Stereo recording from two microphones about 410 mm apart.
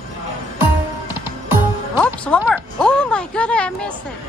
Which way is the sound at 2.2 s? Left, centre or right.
Centre.